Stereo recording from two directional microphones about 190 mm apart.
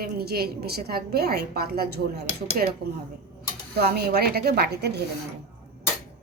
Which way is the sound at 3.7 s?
55° right (ahead or behind).